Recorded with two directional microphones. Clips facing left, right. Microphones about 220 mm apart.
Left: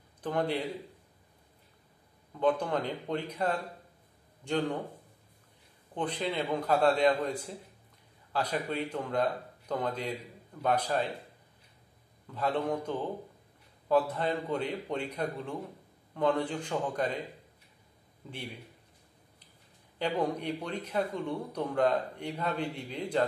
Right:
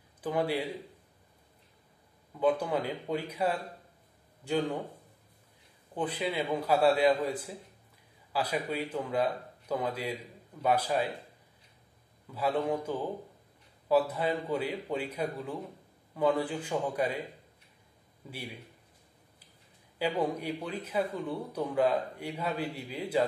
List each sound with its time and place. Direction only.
0.2 s a man's voice: 5° right (ahead or behind)
2.4 s a man's voice: 10° right (ahead or behind)
5.9 s a man's voice: 10° right (ahead or behind)
12.4 s a man's voice: 5° right (ahead or behind)
18.2 s a man's voice: 10° right (ahead or behind)
20.0 s a man's voice: 5° right (ahead or behind)